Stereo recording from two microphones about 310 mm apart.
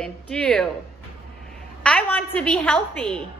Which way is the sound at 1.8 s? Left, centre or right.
Centre.